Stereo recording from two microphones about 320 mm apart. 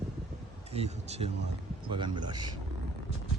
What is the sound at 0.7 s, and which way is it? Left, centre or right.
Speech, centre.